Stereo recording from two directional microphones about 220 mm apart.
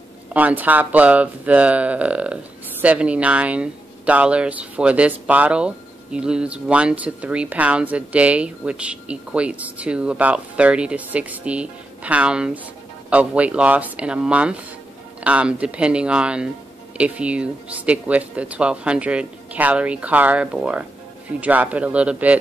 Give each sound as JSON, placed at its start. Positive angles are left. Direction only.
{"t": 0.3, "sound": "speech", "side_deg": -5}